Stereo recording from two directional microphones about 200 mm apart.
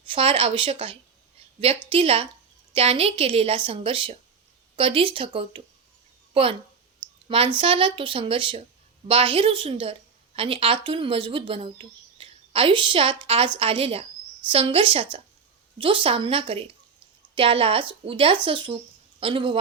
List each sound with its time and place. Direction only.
0.0 s speech: 25° right (ahead or behind)